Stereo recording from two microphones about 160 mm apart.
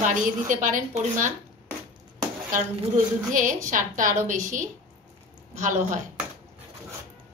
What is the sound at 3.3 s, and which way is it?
Speech, 55° right (ahead or behind).